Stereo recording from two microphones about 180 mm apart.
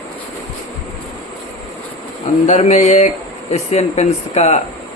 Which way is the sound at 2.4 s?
40° left (ahead or behind).